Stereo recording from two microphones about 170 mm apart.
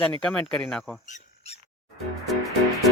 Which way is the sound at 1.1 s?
40° left (ahead or behind).